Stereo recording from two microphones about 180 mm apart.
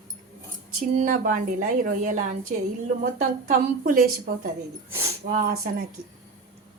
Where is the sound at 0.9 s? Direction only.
45° right (ahead or behind).